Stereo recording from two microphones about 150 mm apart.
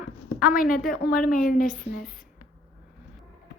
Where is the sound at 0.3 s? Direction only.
70° left (ahead or behind).